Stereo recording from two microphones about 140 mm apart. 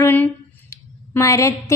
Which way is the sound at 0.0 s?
15° left (ahead or behind).